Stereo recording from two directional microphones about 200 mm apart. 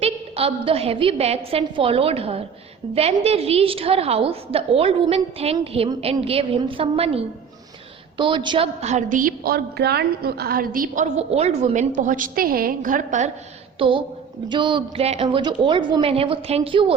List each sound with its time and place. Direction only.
0.0 s a woman's voice: 30° right (ahead or behind); by 11.0 s 45° right (ahead or behind)
11.3 s a woman's voice: 30° right (ahead or behind)
13.7 s a woman's voice: 25° right (ahead or behind)